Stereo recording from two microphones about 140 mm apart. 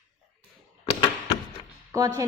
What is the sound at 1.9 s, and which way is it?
Speech, 25° right (ahead or behind).